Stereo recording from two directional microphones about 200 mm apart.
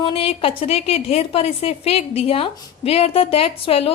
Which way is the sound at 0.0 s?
30° left (ahead or behind).